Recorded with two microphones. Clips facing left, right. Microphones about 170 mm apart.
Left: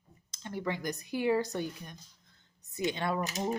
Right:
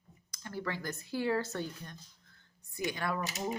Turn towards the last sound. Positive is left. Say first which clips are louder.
# left 3 dB
turn(degrees=25)  # may be behind; listen again after turning